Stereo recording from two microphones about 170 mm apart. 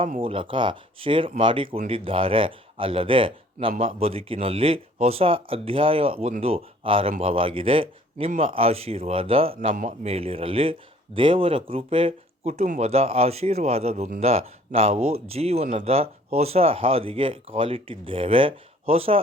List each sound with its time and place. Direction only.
0.0 s speech: 35° right (ahead or behind)
10.1 s speech: 35° right (ahead or behind)